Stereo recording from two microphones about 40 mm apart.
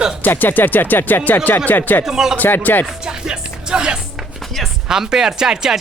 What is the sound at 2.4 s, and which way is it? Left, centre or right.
Speech, left.